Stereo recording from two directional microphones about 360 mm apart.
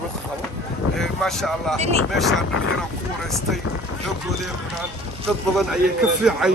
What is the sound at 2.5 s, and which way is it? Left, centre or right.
Speech, left.